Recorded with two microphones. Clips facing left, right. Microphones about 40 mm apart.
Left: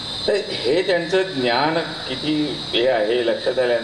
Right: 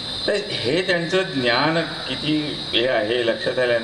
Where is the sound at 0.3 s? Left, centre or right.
Right.